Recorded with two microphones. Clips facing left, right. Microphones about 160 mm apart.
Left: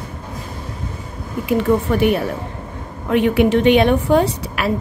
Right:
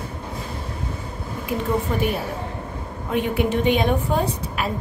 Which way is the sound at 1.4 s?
70° left (ahead or behind).